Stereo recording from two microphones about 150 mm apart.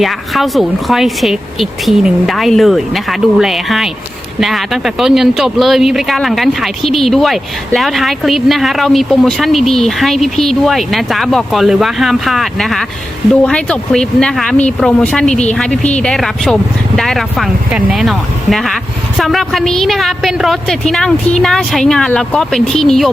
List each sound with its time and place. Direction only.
0.0 s speech: centre (ahead or behind)